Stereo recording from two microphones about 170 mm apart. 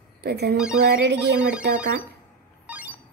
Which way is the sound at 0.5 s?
5° right (ahead or behind).